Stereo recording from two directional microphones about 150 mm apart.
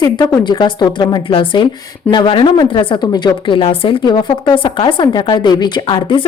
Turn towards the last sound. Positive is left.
turn(degrees=35)  # may be behind; listen again after turning